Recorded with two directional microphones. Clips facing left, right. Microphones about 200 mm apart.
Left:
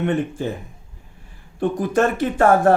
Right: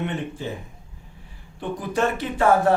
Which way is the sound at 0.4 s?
50° left (ahead or behind).